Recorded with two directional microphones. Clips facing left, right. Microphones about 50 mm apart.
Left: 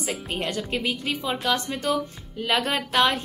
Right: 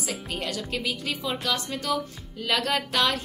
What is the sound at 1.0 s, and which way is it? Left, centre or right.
A woman's voice, centre.